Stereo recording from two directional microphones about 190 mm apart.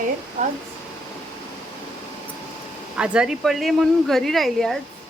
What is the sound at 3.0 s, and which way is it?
Speech, 5° right (ahead or behind).